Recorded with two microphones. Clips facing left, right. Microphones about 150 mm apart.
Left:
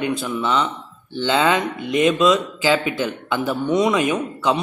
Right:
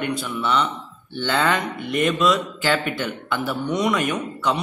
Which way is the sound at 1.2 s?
15° left (ahead or behind).